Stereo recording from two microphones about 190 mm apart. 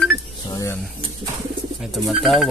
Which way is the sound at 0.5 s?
15° left (ahead or behind).